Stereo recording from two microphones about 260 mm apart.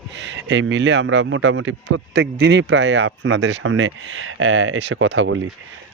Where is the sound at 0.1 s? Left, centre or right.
Right.